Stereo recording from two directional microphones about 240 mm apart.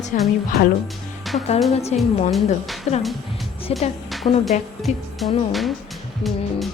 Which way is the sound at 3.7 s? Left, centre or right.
Left.